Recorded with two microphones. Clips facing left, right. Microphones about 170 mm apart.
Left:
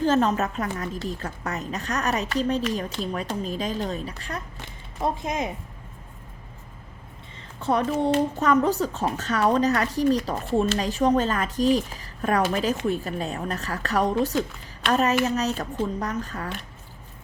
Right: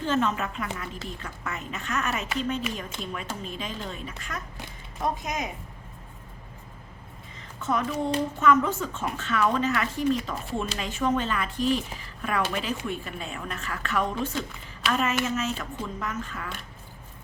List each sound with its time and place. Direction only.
0.0 s a woman's voice: 40° left (ahead or behind)
7.6 s a woman's voice: 35° left (ahead or behind)